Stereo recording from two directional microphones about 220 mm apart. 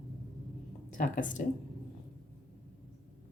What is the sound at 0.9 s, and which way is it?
Speech, 35° left (ahead or behind).